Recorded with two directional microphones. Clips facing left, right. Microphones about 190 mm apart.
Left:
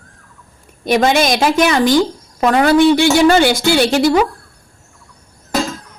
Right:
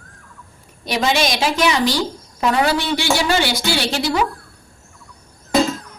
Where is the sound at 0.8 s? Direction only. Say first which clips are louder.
Left 6 dB; 50° left (ahead or behind).